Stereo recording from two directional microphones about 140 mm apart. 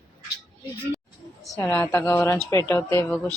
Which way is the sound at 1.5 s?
15° left (ahead or behind).